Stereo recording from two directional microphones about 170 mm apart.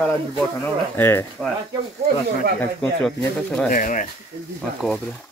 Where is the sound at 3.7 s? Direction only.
50° left (ahead or behind).